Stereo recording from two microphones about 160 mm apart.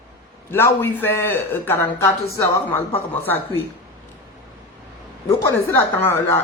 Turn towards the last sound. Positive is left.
turn(degrees=15)  # may be behind; listen again after turning